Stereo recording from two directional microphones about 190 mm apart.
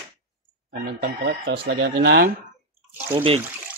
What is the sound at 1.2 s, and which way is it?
Speech, 70° right (ahead or behind).